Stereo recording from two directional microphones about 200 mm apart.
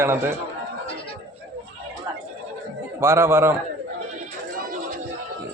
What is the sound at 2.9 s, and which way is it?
Speech, 15° right (ahead or behind).